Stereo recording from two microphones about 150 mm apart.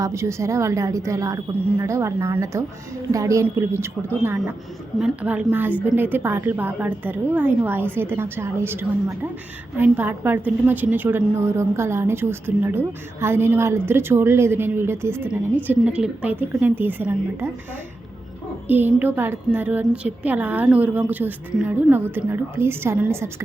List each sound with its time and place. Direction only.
0.0 s a woman's voice: 20° right (ahead or behind)
4.9 s a woman's voice: 5° right (ahead or behind)
18.7 s a woman's voice: 10° right (ahead or behind)